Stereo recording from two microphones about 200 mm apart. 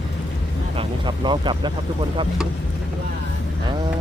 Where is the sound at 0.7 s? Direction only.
25° right (ahead or behind).